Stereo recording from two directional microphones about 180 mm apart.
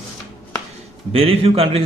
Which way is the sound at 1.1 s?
30° right (ahead or behind).